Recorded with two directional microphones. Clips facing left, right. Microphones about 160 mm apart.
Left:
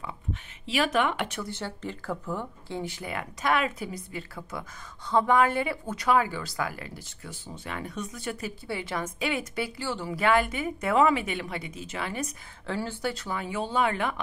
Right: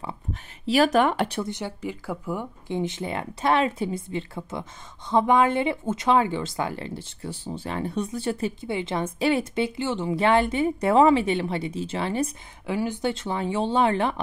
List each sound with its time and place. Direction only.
0.0 s speech: 40° right (ahead or behind)
1.4 s speech: 15° right (ahead or behind)
12.6 s speech: 15° right (ahead or behind); by 14.2 s 30° right (ahead or behind)